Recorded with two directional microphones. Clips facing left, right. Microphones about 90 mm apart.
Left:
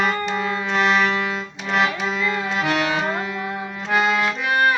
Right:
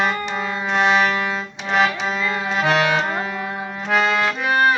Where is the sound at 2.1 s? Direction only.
20° right (ahead or behind).